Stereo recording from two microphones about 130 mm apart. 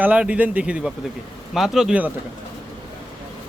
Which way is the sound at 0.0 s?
10° right (ahead or behind).